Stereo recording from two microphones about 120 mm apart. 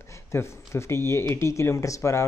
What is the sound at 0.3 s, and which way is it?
Speech, 20° left (ahead or behind).